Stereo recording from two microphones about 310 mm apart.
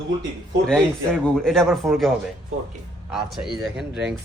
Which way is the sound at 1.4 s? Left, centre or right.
Centre.